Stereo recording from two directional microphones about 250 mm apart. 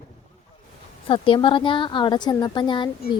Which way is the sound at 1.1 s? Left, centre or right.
Left.